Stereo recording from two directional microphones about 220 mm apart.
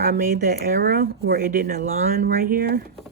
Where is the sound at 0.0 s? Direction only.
40° right (ahead or behind).